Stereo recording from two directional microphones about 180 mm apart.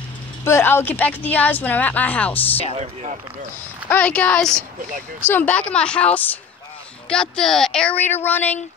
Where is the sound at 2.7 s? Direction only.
40° right (ahead or behind).